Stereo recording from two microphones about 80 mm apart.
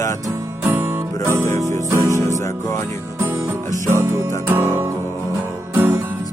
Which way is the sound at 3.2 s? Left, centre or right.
Right.